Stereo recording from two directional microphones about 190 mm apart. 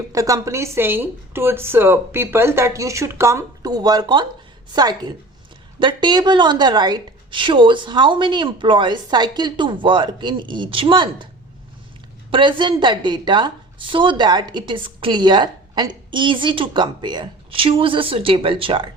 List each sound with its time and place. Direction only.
0.1 s a woman's voice: 15° right (ahead or behind)
12.3 s a woman's voice: 25° right (ahead or behind)